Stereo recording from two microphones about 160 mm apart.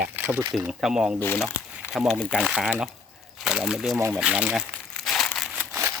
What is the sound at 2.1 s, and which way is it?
Speech, 10° left (ahead or behind).